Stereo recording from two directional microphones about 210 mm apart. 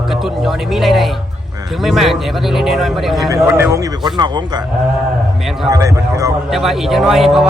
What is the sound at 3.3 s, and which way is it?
A man's voice, 15° right (ahead or behind).